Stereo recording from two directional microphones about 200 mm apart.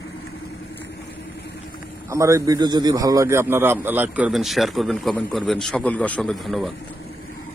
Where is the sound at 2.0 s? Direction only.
15° right (ahead or behind).